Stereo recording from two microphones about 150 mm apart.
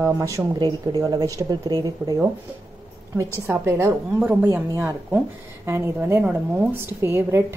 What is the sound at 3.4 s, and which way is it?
Speech, 15° right (ahead or behind).